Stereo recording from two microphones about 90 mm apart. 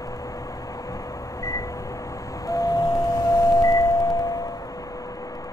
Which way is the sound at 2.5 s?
50° left (ahead or behind).